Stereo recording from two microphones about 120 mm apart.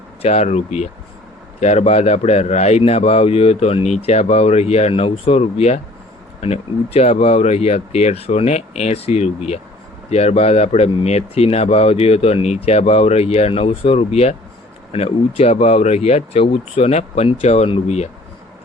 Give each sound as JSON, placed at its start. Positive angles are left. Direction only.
{"t": 0.2, "sound": "speech", "side_deg": 65}